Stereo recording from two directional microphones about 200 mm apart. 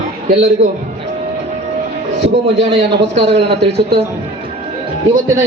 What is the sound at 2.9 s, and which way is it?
Speech, 60° right (ahead or behind).